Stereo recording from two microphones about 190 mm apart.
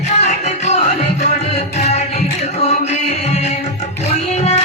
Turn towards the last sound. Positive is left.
turn(degrees=35)  # may be behind; listen again after turning